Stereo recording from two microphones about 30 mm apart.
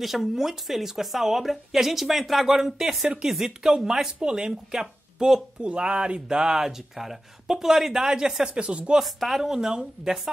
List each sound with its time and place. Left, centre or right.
0.0 s speech: centre
2.4 s speech: centre
5.6 s speech: right; by 8.2 s centre
8.5 s speech: right
9.0 s speech: centre
9.4 s speech: centre